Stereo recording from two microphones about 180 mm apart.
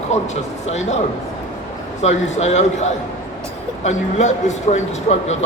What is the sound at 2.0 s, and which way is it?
A man's voice, 40° left (ahead or behind).